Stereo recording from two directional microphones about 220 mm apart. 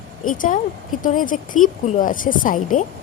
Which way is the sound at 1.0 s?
35° left (ahead or behind).